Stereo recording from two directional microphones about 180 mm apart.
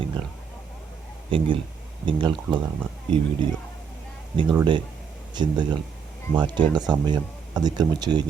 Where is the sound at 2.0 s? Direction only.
25° right (ahead or behind).